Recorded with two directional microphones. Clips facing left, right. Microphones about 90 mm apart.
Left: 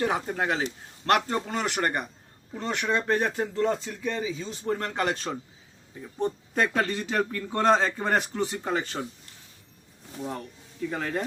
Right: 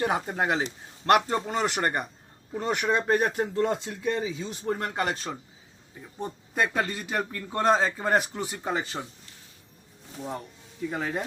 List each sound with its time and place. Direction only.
0.3 s speech: 20° right (ahead or behind)
0.6 s speech: 5° right (ahead or behind)
2.5 s speech: 15° right (ahead or behind)
10.2 s speech: 5° right (ahead or behind)